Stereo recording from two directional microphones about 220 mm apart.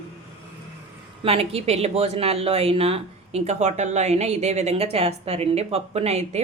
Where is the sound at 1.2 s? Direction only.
25° right (ahead or behind).